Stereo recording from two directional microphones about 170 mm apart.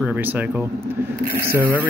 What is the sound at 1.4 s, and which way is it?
Speech, 10° right (ahead or behind).